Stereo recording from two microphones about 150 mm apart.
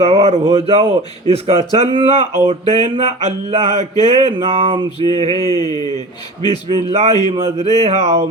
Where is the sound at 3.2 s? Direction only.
50° right (ahead or behind).